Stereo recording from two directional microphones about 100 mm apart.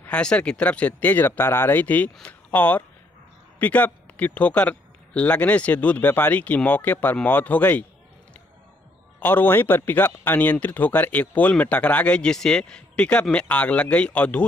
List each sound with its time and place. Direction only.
0.0 s speech: 10° left (ahead or behind)
9.2 s speech: 20° left (ahead or behind)